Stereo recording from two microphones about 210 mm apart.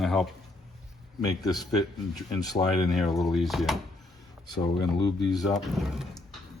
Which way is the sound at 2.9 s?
Centre (ahead or behind).